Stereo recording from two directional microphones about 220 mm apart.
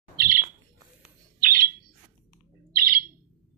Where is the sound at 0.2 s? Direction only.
40° right (ahead or behind).